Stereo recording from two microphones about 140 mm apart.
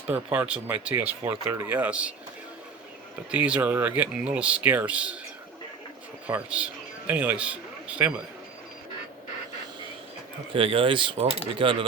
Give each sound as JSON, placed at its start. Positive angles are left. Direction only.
{"t": 0.1, "sound": "speech", "side_deg": -10}
{"t": 3.3, "sound": "speech", "side_deg": -10}
{"t": 6.2, "sound": "speech", "side_deg": -10}
{"t": 10.5, "sound": "speech", "side_deg": -40}